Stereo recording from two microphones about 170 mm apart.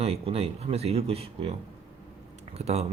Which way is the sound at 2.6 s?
40° right (ahead or behind).